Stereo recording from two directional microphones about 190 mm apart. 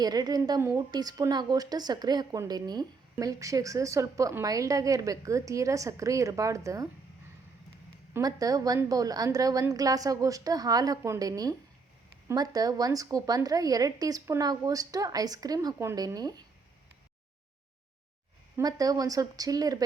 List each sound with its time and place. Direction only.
0.0 s a woman's voice: 20° right (ahead or behind)
8.1 s a woman's voice: 20° right (ahead or behind)
18.5 s a woman's voice: 20° right (ahead or behind)